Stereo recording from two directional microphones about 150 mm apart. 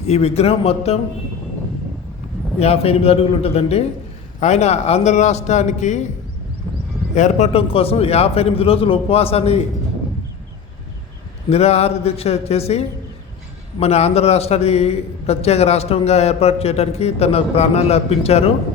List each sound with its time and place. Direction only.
0.1 s a man's voice: 45° left (ahead or behind)
2.6 s a man's voice: 40° left (ahead or behind)
7.1 s a man's voice: 50° left (ahead or behind)
11.4 s a man's voice: 45° left (ahead or behind)